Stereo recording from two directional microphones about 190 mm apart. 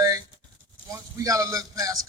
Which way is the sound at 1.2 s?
15° right (ahead or behind).